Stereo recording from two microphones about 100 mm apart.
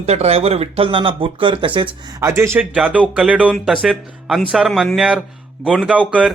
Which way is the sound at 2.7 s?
15° right (ahead or behind).